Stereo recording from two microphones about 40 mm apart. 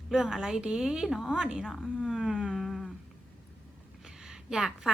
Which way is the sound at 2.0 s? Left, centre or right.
Centre.